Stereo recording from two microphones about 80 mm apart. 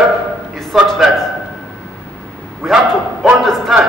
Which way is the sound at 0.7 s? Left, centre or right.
Centre.